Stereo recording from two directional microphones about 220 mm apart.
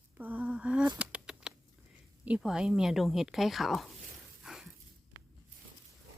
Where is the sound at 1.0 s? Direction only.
5° right (ahead or behind).